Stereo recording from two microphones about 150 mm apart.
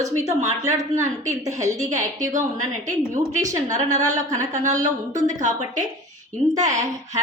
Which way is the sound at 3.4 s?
20° right (ahead or behind).